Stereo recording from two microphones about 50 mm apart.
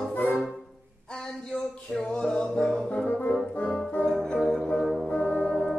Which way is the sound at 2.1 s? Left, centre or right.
Centre.